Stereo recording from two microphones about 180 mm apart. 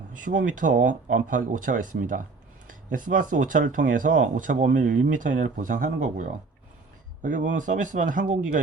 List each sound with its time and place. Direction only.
0.3 s speech: 45° right (ahead or behind)